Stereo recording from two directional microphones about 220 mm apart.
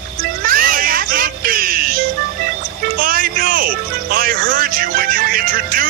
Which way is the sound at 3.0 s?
40° right (ahead or behind).